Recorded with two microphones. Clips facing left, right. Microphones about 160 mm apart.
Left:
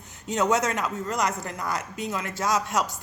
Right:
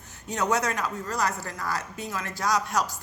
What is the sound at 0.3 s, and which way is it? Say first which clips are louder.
Speech: left 3 dB; 20° left (ahead or behind).